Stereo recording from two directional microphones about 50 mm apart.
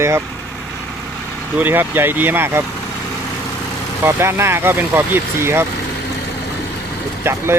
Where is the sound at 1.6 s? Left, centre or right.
Right.